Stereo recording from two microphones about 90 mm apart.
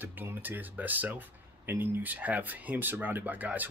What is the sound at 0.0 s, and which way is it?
Speech, 20° right (ahead or behind).